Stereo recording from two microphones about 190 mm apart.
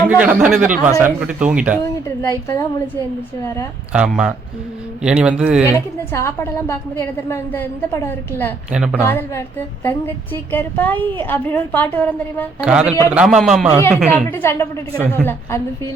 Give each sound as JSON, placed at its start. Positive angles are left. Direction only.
{"t": 0.2, "sound": "speech", "side_deg": -10}
{"t": 2.5, "sound": "a woman's voice", "side_deg": 15}
{"t": 3.9, "sound": "a man's voice", "side_deg": -5}
{"t": 6.1, "sound": "a woman's voice", "side_deg": 15}
{"t": 8.7, "sound": "a man's voice", "side_deg": -5}
{"t": 9.0, "sound": "a woman's voice", "side_deg": 10}
{"t": 12.6, "sound": "a man's voice", "side_deg": -5}
{"t": 14.3, "sound": "a woman's voice", "side_deg": 10}